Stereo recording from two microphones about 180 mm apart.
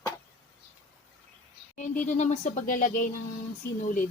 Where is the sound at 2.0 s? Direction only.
40° left (ahead or behind).